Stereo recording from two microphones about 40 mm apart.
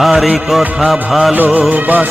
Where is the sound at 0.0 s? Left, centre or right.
Centre.